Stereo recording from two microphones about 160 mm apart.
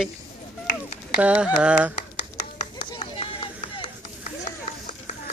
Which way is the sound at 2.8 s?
35° left (ahead or behind).